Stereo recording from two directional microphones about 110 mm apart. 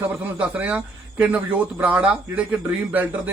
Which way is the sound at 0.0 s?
10° right (ahead or behind).